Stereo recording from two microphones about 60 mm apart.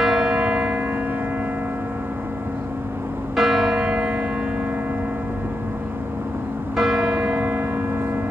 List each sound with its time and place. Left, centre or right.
0.0 s church bell: centre
3.3 s church bell: centre
6.8 s church bell: centre
7.1 s church bell: right